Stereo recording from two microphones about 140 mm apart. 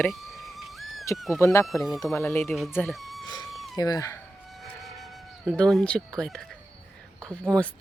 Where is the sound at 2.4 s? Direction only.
Centre (ahead or behind).